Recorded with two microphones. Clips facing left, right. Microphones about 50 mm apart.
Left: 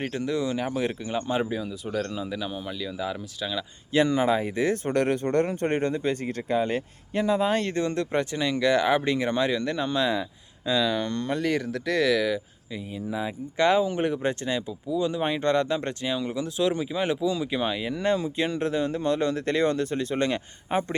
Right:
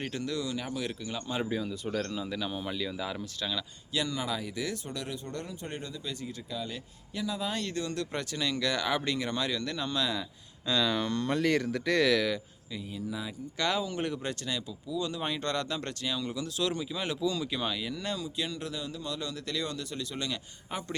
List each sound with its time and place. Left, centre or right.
0.0 s speech: left
1.5 s speech: centre
3.9 s speech: left
10.7 s speech: centre
12.7 s speech: left